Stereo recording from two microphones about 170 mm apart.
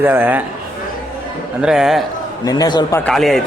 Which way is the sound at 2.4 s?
25° left (ahead or behind).